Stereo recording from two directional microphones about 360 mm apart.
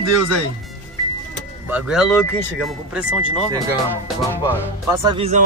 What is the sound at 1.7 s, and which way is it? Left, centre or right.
Speech, centre.